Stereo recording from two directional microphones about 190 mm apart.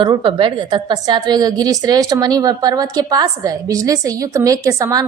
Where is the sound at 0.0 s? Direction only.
25° right (ahead or behind).